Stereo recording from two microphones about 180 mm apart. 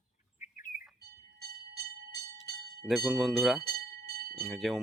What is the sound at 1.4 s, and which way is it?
Train, 60° right (ahead or behind).